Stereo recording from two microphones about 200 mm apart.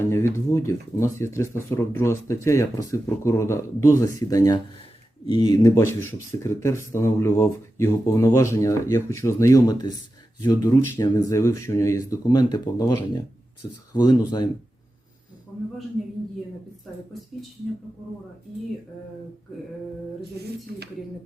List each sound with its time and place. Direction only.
0.0 s speech: 15° left (ahead or behind)
13.9 s speech: 20° left (ahead or behind)